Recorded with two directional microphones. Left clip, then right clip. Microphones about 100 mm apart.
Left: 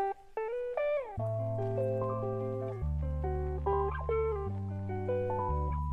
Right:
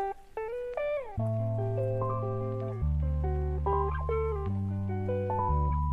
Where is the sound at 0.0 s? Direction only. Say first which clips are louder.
Even; 35° right (ahead or behind).